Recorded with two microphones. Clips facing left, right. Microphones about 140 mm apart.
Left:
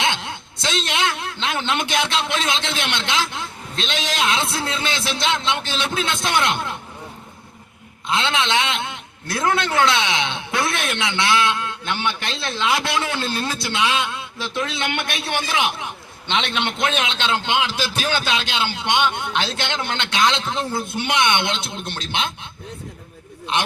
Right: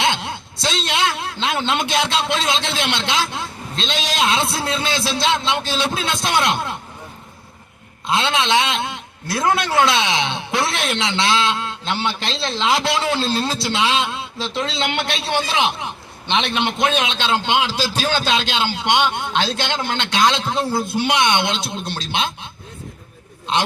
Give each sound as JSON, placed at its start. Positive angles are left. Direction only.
{"t": 0.7, "sound": "a man's voice", "side_deg": -20}
{"t": 8.0, "sound": "a man's voice", "side_deg": -20}
{"t": 20.8, "sound": "speech", "side_deg": 20}
{"t": 21.1, "sound": "speech", "side_deg": -20}